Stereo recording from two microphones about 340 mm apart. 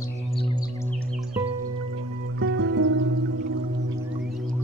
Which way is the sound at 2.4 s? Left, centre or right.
Right.